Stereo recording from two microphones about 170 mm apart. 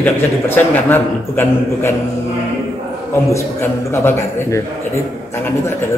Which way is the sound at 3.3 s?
15° left (ahead or behind).